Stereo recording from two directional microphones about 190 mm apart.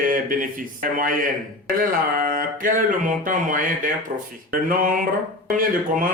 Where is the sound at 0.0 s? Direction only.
45° right (ahead or behind).